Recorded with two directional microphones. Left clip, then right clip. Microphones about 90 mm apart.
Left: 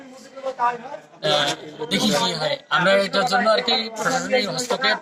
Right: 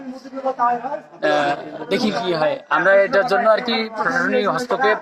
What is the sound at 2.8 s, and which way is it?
Speech, 15° right (ahead or behind).